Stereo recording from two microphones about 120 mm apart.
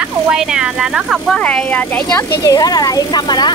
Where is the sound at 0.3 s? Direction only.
5° right (ahead or behind).